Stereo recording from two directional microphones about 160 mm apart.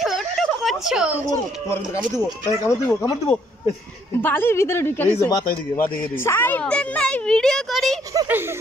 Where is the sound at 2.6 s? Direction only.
20° left (ahead or behind); by 8.0 s centre (ahead or behind).